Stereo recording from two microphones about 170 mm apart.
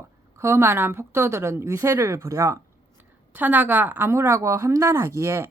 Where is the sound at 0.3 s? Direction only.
15° right (ahead or behind).